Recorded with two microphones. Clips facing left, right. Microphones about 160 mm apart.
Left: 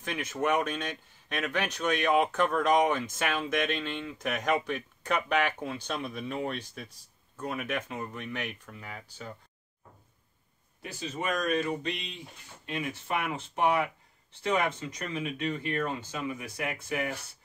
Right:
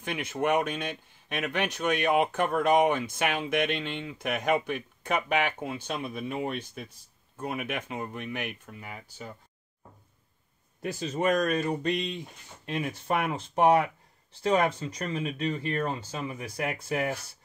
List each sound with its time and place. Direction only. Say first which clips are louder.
0.0 s speech: right 2 dB; 10° right (ahead or behind)
10.8 s speech: right 7 dB; 40° right (ahead or behind)